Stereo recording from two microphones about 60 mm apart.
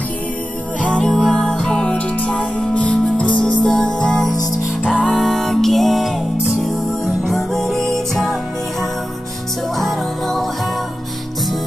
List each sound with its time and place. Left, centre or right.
0.8 s music: centre
4.8 s music: centre
5.1 s music: centre
9.8 s music: centre